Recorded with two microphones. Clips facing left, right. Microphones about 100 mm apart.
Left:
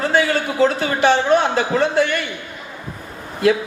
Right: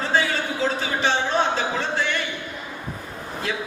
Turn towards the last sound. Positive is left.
turn(degrees=60)  # may be behind; listen again after turning